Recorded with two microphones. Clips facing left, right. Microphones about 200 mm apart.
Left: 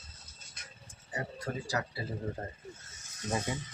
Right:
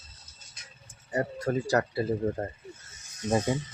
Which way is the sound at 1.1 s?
45° right (ahead or behind).